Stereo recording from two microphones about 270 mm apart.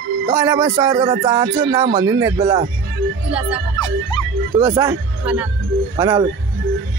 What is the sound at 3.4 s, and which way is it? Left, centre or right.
Speech, centre.